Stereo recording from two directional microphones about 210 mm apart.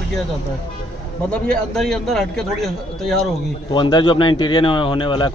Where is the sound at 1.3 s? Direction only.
5° left (ahead or behind).